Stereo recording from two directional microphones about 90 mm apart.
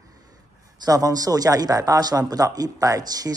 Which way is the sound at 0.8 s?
40° right (ahead or behind).